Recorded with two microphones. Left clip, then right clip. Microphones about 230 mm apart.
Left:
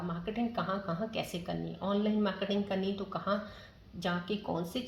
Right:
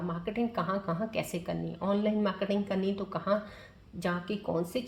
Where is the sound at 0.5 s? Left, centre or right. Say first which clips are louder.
Right 3 dB; right.